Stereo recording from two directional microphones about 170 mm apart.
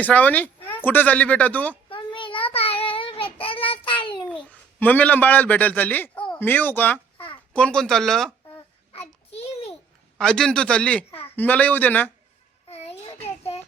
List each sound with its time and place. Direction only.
0.0 s speech: 10° left (ahead or behind)
1.9 s child singing: 30° left (ahead or behind)
4.0 s babbling: 30° left (ahead or behind)
4.3 s a man's voice: 10° left (ahead or behind)
8.9 s a sound: 35° left (ahead or behind)
10.2 s a man's voice: 5° left (ahead or behind)
12.6 s child singing: 35° left (ahead or behind)